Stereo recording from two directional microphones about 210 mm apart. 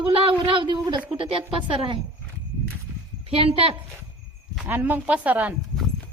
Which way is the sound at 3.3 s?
25° right (ahead or behind).